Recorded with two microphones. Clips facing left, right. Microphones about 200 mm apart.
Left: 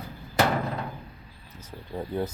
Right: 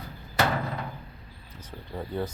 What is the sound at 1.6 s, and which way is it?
Speech, 15° left (ahead or behind).